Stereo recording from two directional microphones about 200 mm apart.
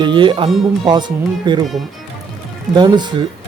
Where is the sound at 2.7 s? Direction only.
20° right (ahead or behind).